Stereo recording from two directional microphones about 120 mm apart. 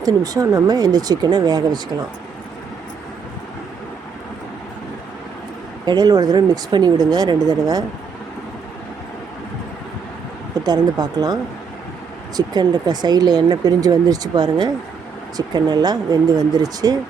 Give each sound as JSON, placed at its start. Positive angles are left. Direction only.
{"t": 0.0, "sound": "speech", "side_deg": -30}
{"t": 5.8, "sound": "speech", "side_deg": -35}
{"t": 10.6, "sound": "speech", "side_deg": -35}
{"t": 12.4, "sound": "speech", "side_deg": -35}